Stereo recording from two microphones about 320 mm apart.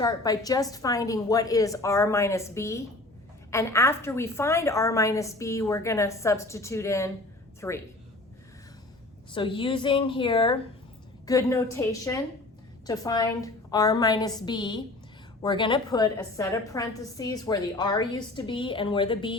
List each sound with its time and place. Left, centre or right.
0.0 s a woman's voice: centre
9.3 s a woman's voice: centre